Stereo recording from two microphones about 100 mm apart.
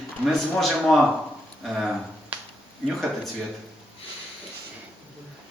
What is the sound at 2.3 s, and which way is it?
Finger snapping, 20° right (ahead or behind).